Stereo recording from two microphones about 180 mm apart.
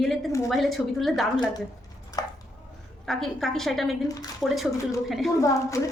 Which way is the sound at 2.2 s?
20° left (ahead or behind).